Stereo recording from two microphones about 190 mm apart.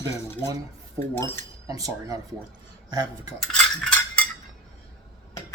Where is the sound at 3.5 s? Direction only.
5° left (ahead or behind).